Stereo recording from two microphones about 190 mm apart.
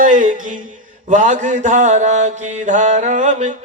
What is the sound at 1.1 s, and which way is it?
Speech, 40° right (ahead or behind).